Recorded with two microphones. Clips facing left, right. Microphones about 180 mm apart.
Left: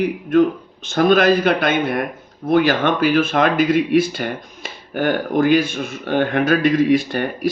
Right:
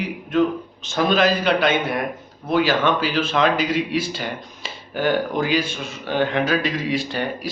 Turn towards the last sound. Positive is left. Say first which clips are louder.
# left 3 dB
turn(degrees=50)  # may be behind; listen again after turning